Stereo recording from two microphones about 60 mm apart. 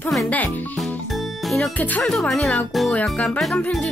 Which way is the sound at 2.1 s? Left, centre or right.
Centre.